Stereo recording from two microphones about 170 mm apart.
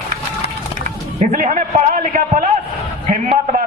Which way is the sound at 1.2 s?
55° right (ahead or behind).